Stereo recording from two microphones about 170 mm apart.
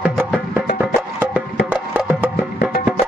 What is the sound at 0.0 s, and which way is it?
Music, 5° right (ahead or behind).